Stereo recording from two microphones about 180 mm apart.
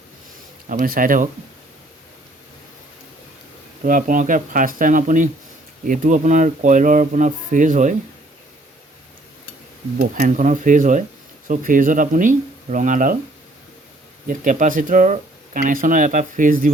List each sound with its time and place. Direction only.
0.7 s speech: 50° right (ahead or behind)
3.8 s speech: 45° right (ahead or behind)
10.0 s speech: 45° right (ahead or behind)
14.3 s speech: 45° right (ahead or behind)